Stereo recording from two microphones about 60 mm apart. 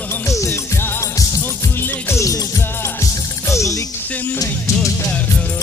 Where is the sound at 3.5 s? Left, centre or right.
Left.